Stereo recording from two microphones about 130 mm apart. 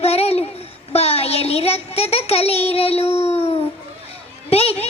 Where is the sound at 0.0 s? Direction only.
50° left (ahead or behind).